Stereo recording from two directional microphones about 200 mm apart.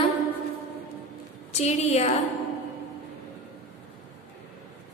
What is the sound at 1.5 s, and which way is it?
Speech, 35° left (ahead or behind).